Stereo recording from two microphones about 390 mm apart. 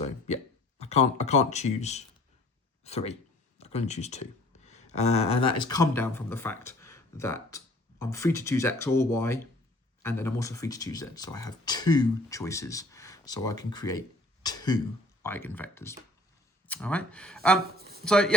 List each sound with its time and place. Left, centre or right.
0.3 s speech: centre
14.4 s cough: centre
15.2 s speech: centre
17.7 s a sound: right
18.0 s speech: centre